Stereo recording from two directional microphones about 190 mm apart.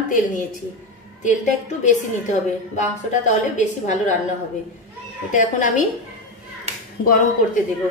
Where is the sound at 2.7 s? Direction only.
40° left (ahead or behind).